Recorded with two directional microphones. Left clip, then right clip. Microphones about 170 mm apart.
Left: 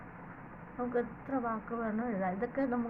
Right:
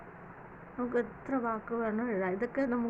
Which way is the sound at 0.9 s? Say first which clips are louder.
Right 2 dB; 40° right (ahead or behind).